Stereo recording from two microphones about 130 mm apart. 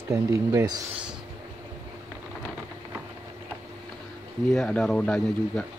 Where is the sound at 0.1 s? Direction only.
25° right (ahead or behind).